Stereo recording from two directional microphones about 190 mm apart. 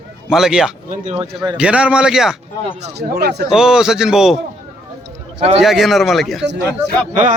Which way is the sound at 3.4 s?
5° right (ahead or behind).